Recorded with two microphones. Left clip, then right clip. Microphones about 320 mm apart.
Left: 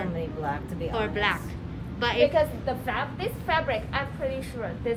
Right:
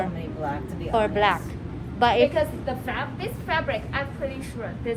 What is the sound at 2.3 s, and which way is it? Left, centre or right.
A woman's voice, left.